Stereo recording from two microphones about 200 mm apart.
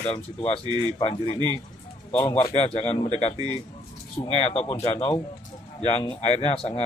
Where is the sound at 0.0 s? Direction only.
30° left (ahead or behind).